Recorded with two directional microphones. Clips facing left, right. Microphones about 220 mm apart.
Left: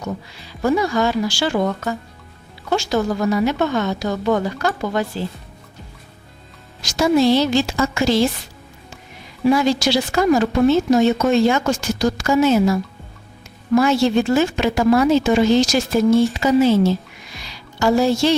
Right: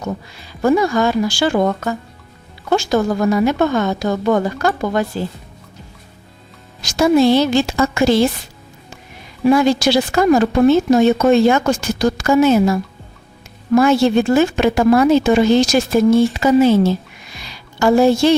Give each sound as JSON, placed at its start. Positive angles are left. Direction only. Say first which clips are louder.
{"t": 0.3, "sound": "speech", "louder": "right 4 dB", "side_deg": -50}
{"t": 6.8, "sound": "a woman's voice", "louder": "right 3 dB", "side_deg": -55}
{"t": 9.5, "sound": "a woman's voice", "louder": "right 3 dB", "side_deg": -55}
{"t": 13.7, "sound": "a woman's voice", "louder": "right 3 dB", "side_deg": -55}
{"t": 17.3, "sound": "music", "louder": "right 2 dB", "side_deg": -55}